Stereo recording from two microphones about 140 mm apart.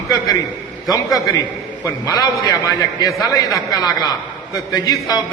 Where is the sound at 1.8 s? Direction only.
25° left (ahead or behind).